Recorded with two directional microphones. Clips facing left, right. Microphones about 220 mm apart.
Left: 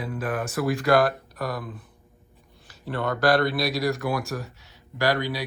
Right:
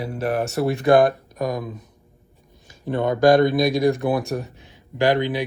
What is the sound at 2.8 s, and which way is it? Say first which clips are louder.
Speech: right 6 dB; 15° right (ahead or behind).